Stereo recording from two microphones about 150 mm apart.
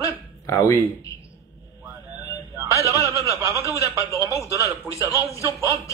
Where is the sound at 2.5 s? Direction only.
20° right (ahead or behind).